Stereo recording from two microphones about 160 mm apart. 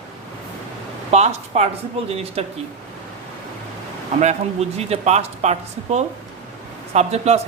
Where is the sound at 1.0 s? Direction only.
40° right (ahead or behind).